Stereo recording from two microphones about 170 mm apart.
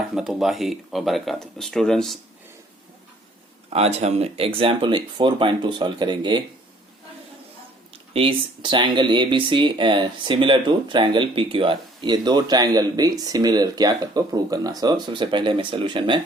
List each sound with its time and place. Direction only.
0.1 s speech: centre (ahead or behind)
3.7 s speech: 40° right (ahead or behind)
8.1 s speech: 30° right (ahead or behind)